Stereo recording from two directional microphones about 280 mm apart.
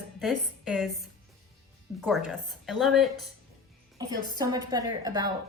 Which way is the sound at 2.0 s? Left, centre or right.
Centre.